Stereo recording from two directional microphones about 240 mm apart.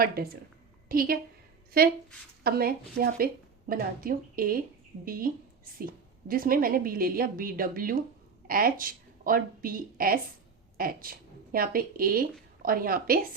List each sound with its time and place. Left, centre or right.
0.0 s a woman's voice: right
2.4 s a woman's voice: right
5.8 s a woman's voice: right